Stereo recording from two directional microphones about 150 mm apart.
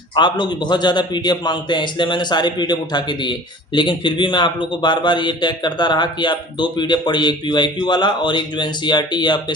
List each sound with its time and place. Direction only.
0.2 s a man's voice: 30° left (ahead or behind)